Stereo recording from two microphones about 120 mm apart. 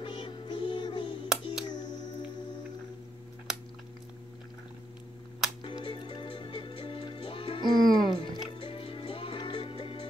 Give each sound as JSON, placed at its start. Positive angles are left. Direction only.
{"t": 0.0, "sound": "music", "side_deg": 40}
{"t": 1.3, "sound": "music", "side_deg": -5}
{"t": 5.6, "sound": "music", "side_deg": 45}
{"t": 7.8, "sound": "music", "side_deg": 0}
{"t": 8.2, "sound": "music", "side_deg": 45}